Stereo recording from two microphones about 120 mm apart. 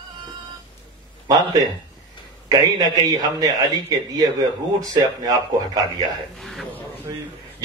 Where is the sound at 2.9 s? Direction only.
30° right (ahead or behind).